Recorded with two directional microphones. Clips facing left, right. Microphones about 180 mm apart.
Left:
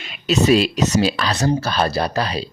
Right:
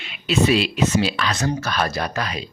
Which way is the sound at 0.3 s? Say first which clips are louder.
Left 3 dB; 40° left (ahead or behind).